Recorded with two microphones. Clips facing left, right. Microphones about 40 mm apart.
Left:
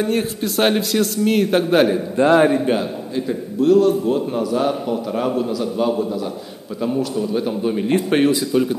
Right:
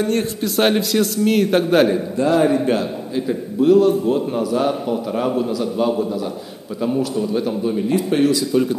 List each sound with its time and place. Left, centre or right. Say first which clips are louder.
0.0 s a man's voice: even; centre
2.1 s a man's voice: left 3 dB; left
2.6 s a man's voice: even; centre
3.2 s a man's voice: right 1 dB; centre
7.9 s a man's voice: left 1 dB; left
8.5 s a man's voice: even; centre